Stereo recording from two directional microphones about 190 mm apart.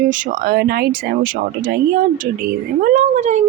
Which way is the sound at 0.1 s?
45° right (ahead or behind).